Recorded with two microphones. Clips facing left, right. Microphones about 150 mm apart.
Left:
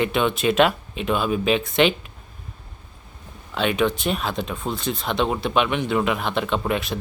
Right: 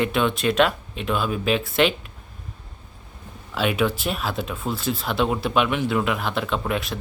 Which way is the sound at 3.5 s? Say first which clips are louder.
Left 1 dB; 5° right (ahead or behind).